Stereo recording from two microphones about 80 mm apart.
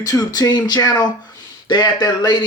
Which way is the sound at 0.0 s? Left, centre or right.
Left.